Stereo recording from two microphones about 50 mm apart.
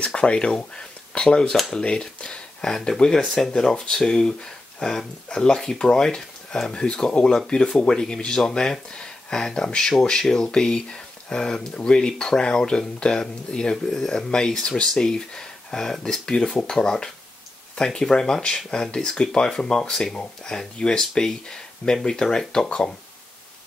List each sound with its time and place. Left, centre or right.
0.0 s speech: left